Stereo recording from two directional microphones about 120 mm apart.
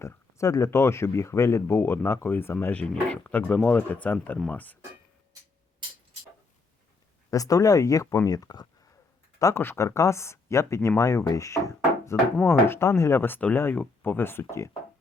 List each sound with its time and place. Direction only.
0.0 s speech: 25° left (ahead or behind)
7.3 s speech: 30° left (ahead or behind)